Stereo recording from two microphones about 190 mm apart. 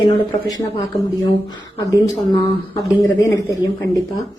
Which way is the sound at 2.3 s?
15° left (ahead or behind).